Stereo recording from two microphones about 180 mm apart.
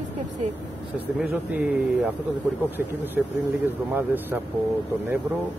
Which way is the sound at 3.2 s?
5° right (ahead or behind).